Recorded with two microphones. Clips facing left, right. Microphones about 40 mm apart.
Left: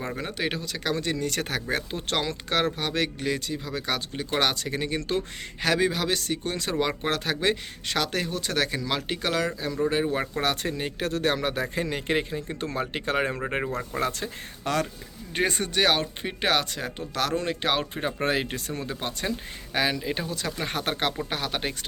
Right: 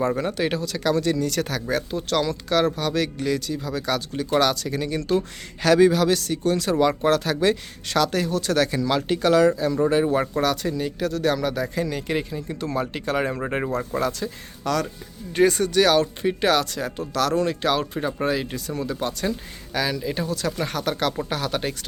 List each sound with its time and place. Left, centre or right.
0.2 s speech: centre; by 5.2 s left
5.6 s speech: centre
10.4 s speech: left
13.3 s speech: centre
14.0 s speech: left
18.0 s speech: left
18.7 s speech: left; by 20.7 s centre
20.7 s speech: left
20.9 s speech: left